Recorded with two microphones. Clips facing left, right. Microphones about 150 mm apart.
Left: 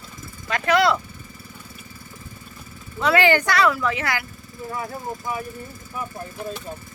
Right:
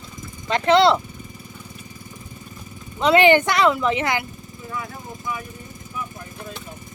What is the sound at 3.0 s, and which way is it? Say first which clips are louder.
Speech: right 4 dB; 20° right (ahead or behind).